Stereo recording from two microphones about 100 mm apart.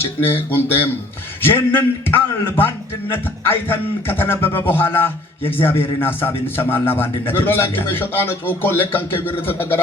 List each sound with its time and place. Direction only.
0.3 s a man's voice: 20° left (ahead or behind)